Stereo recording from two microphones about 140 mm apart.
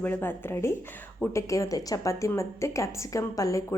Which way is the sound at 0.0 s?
15° left (ahead or behind).